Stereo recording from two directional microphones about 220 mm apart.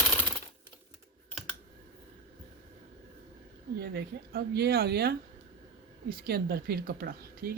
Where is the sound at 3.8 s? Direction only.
45° right (ahead or behind).